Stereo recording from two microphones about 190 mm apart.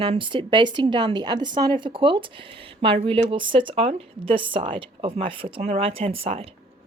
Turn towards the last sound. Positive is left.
turn(degrees=-30)  # may be behind; listen again after turning